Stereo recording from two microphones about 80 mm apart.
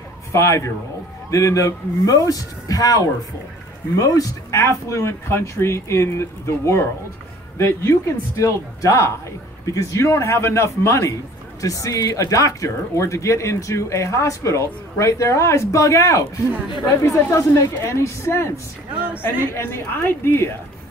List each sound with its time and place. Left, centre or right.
0.3 s speech: left
4.0 s speech: left
19.5 s a woman's voice: left